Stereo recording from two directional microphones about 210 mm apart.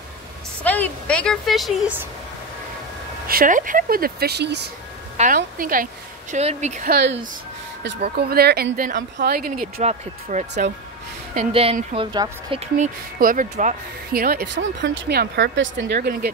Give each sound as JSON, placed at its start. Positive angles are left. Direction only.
{"t": 0.7, "sound": "speech", "side_deg": 5}
{"t": 3.3, "sound": "speech", "side_deg": -40}
{"t": 5.1, "sound": "speech", "side_deg": -40}
{"t": 6.9, "sound": "speech", "side_deg": -50}
{"t": 9.8, "sound": "speech", "side_deg": -30}